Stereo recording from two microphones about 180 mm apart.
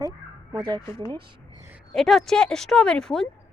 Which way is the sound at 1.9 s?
Centre (ahead or behind).